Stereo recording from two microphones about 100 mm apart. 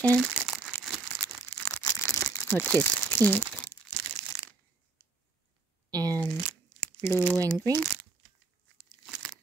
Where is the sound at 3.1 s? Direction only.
20° left (ahead or behind).